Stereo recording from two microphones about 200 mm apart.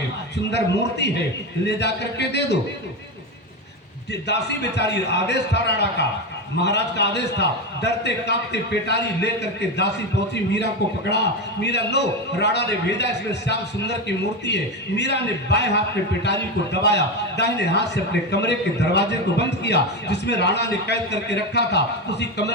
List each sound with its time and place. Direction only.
0.5 s a man's voice: 60° left (ahead or behind)
4.1 s a man's voice: 60° left (ahead or behind)
11.1 s a man's voice: 60° left (ahead or behind)
16.8 s a man's voice: 60° left (ahead or behind)